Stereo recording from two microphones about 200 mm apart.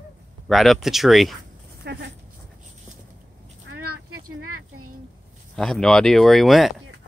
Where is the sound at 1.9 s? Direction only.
55° right (ahead or behind).